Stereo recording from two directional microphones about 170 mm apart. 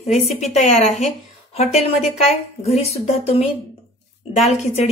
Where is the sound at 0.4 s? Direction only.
40° left (ahead or behind).